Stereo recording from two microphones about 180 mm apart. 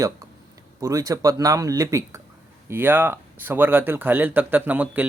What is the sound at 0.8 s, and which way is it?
Speech, 20° right (ahead or behind).